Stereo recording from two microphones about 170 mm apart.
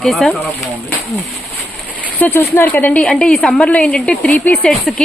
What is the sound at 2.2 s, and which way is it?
A woman's voice, 10° left (ahead or behind).